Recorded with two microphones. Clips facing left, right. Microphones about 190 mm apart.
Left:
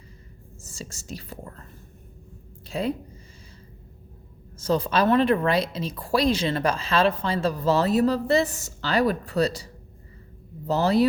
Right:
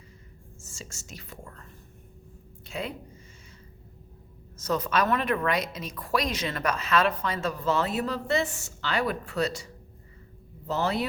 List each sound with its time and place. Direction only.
0.6 s speech: 35° left (ahead or behind)
2.6 s speech: 35° left (ahead or behind)
4.5 s speech: 30° left (ahead or behind)
10.7 s speech: 35° left (ahead or behind)